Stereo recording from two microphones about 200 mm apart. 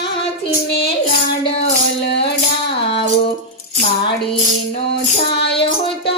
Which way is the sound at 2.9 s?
30° left (ahead or behind).